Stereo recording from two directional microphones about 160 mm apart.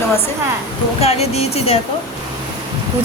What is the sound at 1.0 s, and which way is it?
Speech, 40° left (ahead or behind).